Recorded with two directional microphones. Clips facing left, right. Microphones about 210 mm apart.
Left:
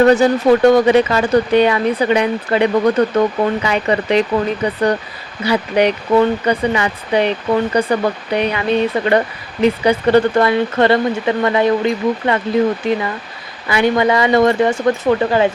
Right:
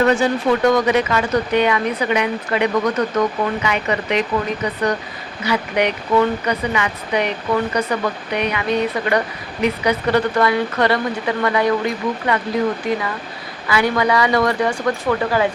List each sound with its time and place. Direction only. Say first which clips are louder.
0.0 s speech: left 5 dB; 40° left (ahead or behind)